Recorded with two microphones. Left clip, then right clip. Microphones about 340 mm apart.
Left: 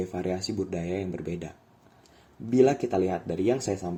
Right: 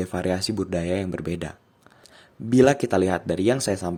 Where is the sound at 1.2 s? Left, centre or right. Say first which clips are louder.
Right 5 dB; right.